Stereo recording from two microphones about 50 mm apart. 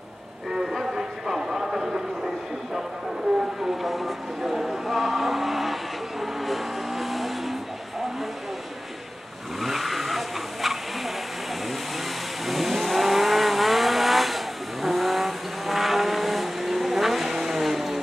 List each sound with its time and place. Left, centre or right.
0.5 s music: centre
3.6 s vehicle: centre
9.6 s vehicle: centre
12.4 s vehicle: centre